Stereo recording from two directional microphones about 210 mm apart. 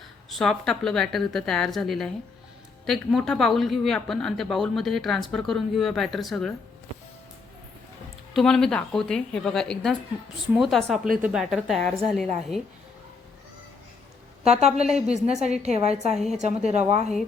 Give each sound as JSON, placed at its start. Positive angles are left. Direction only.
{"t": 0.3, "sound": "a woman's voice", "side_deg": 0}
{"t": 8.3, "sound": "a woman's voice", "side_deg": 0}
{"t": 14.4, "sound": "a woman's voice", "side_deg": -30}
{"t": 16.1, "sound": "a woman's voice", "side_deg": 0}
{"t": 16.4, "sound": "a woman's voice", "side_deg": -30}